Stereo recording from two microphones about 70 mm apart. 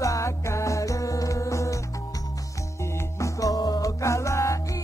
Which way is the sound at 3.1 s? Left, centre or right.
Left.